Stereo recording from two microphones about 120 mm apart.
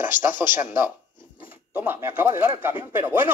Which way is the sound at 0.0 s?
15° right (ahead or behind).